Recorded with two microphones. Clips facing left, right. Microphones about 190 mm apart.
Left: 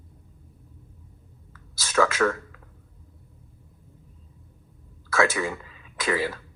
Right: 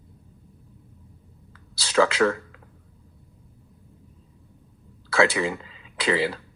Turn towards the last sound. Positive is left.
turn(degrees=-25)  # may be behind; listen again after turning